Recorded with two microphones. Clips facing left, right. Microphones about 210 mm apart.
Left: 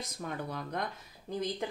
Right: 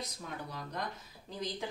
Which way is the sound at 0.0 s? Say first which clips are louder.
Left 4 dB; 60° left (ahead or behind).